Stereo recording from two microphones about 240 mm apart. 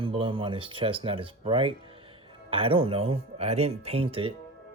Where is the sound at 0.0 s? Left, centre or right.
Right.